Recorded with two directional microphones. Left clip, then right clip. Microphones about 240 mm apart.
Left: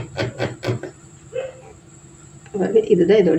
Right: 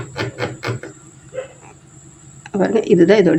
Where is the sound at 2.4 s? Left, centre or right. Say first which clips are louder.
Even; right.